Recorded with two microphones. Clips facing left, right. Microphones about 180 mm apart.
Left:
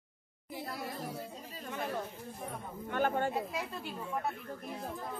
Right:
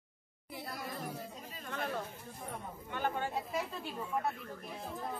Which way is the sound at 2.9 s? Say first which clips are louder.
Left 5 dB; 50° left (ahead or behind).